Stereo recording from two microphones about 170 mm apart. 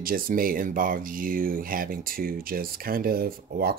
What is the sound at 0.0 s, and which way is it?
Speech, 55° right (ahead or behind).